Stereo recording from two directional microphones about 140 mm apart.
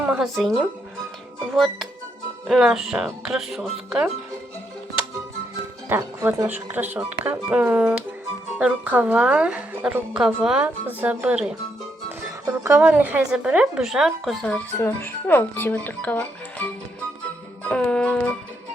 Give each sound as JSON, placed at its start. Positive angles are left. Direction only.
{"t": 0.0, "sound": "music", "side_deg": -10}
{"t": 0.3, "sound": "speech", "side_deg": 0}
{"t": 5.9, "sound": "speech", "side_deg": -20}
{"t": 6.5, "sound": "a woman's voice", "side_deg": -15}
{"t": 12.5, "sound": "a woman's voice", "side_deg": -20}
{"t": 14.8, "sound": "speech", "side_deg": 15}
{"t": 17.6, "sound": "music", "side_deg": 10}